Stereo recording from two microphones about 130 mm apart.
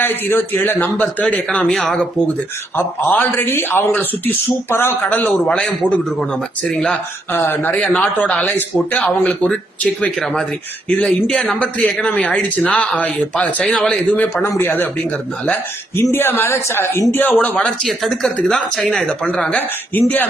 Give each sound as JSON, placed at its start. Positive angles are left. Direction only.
{"t": 0.0, "sound": "speech", "side_deg": 15}